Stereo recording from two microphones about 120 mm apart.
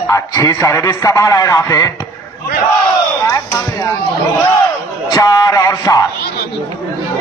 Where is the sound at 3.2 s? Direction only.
25° left (ahead or behind).